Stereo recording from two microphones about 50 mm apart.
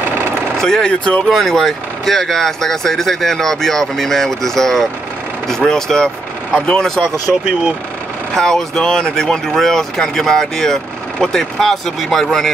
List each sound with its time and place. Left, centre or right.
0.6 s speech: centre
1.3 s speech: centre
8.4 s speech: centre